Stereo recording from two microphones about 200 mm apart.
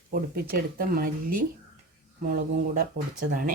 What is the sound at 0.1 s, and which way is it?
Speech, 50° right (ahead or behind).